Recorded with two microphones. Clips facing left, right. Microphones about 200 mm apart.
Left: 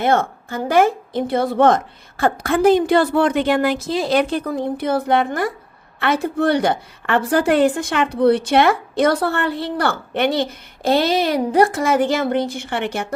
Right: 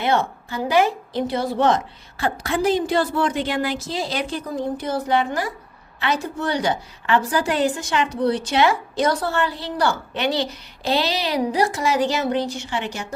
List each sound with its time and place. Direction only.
0.0 s a woman's voice: 50° left (ahead or behind)